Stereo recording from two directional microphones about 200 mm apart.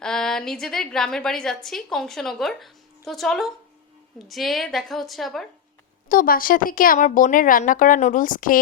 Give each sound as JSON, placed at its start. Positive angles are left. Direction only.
{"t": 0.0, "sound": "a woman's voice", "side_deg": 5}
{"t": 6.1, "sound": "speech", "side_deg": 45}